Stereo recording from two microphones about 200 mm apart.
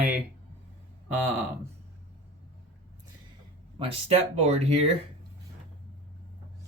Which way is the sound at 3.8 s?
30° right (ahead or behind).